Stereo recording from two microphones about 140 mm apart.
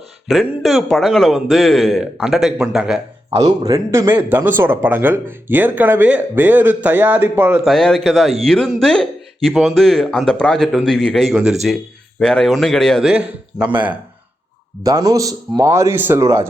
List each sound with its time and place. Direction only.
0.3 s speech: centre (ahead or behind)
3.6 s speech: 20° right (ahead or behind)
7.6 s speech: centre (ahead or behind)
14.8 s a man's voice: 25° right (ahead or behind)